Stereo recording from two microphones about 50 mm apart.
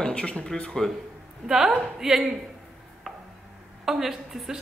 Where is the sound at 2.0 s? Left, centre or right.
Centre.